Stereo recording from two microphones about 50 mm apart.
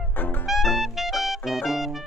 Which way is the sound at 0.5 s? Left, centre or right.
Centre.